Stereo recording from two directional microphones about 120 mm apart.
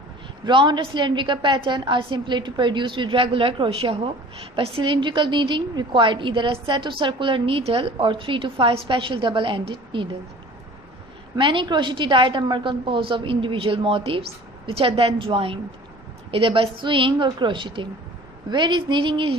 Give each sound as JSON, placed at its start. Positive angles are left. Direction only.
{"t": 0.4, "sound": "a woman's voice", "side_deg": -40}
{"t": 11.3, "sound": "a woman's voice", "side_deg": -45}